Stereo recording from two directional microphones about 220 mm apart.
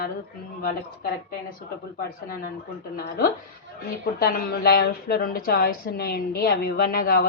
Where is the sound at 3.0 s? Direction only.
45° left (ahead or behind).